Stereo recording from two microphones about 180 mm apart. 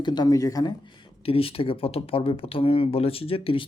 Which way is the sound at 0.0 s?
25° left (ahead or behind).